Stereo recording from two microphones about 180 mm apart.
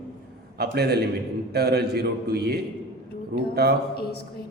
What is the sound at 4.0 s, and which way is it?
Speech, 60° left (ahead or behind).